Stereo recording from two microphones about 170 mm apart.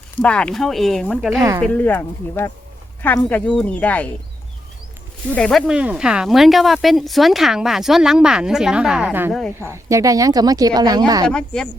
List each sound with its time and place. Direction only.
0.2 s speech: 5° left (ahead or behind)
1.4 s speech: 20° right (ahead or behind)
1.6 s speech: 10° left (ahead or behind)
5.3 s speech: 5° left (ahead or behind); by 11.3 s 20° right (ahead or behind)
11.3 s speech: 5° left (ahead or behind)